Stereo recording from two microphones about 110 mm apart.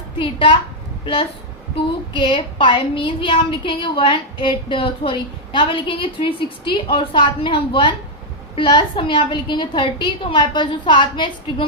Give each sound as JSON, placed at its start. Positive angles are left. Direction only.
{"t": 0.2, "sound": "a woman's voice", "side_deg": 50}